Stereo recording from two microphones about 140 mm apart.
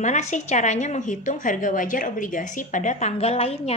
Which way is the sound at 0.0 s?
60° left (ahead or behind).